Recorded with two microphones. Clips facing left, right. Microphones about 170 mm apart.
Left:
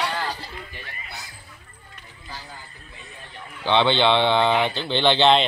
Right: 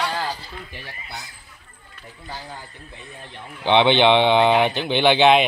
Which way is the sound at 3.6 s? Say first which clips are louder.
Right 3 dB; 15° right (ahead or behind).